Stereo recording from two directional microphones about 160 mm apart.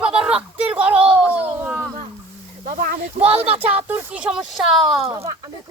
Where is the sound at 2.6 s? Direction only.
60° right (ahead or behind).